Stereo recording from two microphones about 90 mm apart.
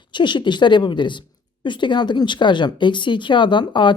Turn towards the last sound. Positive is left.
turn(degrees=60)  # may be behind; listen again after turning